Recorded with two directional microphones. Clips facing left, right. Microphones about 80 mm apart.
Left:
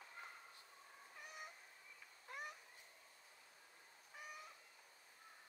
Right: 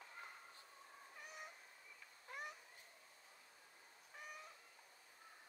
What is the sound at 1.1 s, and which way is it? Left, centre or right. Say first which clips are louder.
Cat: even; centre.